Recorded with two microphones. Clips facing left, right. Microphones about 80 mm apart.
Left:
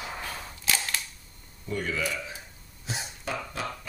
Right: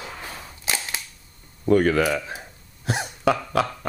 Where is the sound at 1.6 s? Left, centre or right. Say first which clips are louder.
Right 13 dB; right.